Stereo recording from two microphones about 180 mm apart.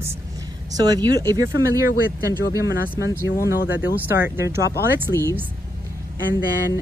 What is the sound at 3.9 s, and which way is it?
Speech, 10° right (ahead or behind).